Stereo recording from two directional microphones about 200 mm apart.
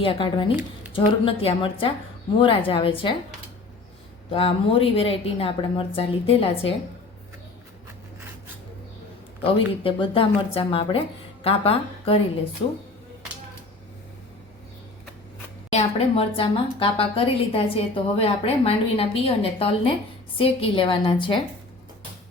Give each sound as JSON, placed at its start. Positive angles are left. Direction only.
{"t": 0.0, "sound": "a woman's voice", "side_deg": 25}
{"t": 4.3, "sound": "a woman's voice", "side_deg": 25}
{"t": 9.4, "sound": "a woman's voice", "side_deg": 25}
{"t": 15.7, "sound": "a woman's voice", "side_deg": 30}